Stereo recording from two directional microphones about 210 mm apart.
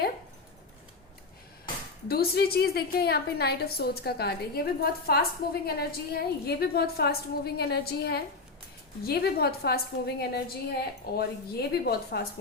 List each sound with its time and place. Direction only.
2.0 s a woman's voice: 50° left (ahead or behind)